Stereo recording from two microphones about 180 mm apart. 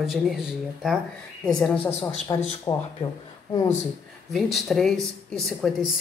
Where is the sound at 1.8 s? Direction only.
35° left (ahead or behind).